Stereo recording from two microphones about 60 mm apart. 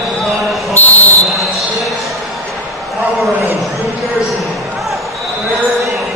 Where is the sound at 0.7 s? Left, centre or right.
Left.